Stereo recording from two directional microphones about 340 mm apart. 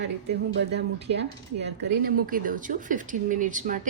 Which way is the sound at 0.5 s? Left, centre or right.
Right.